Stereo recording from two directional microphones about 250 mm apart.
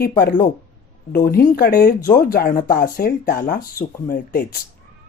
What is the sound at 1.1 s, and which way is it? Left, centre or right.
Speech, left.